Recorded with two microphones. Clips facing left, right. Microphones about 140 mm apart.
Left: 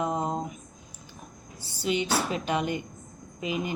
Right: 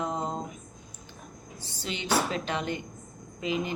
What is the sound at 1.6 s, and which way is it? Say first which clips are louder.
Speech: left 8 dB; 10° left (ahead or behind).